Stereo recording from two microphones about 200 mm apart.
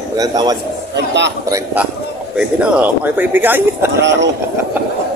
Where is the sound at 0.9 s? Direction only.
60° right (ahead or behind).